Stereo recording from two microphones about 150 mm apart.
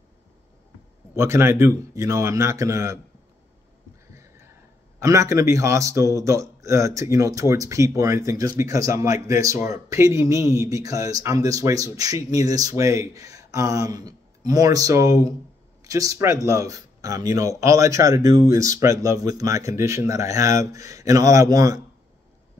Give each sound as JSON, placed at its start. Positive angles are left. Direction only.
{"t": 1.1, "sound": "a man's voice", "side_deg": -15}
{"t": 4.1, "sound": "a sound", "side_deg": -20}
{"t": 5.0, "sound": "a man's voice", "side_deg": -20}